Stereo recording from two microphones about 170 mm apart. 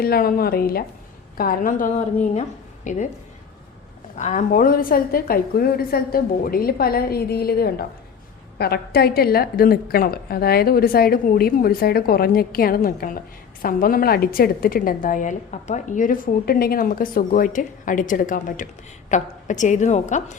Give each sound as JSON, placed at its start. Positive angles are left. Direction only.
{"t": 0.0, "sound": "a woman's voice", "side_deg": 60}
{"t": 4.2, "sound": "a woman's voice", "side_deg": 45}